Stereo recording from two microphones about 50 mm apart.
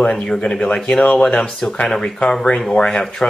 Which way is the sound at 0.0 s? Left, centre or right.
Centre.